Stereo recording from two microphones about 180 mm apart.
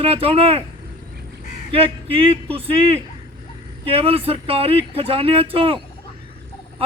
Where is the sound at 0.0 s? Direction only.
30° right (ahead or behind).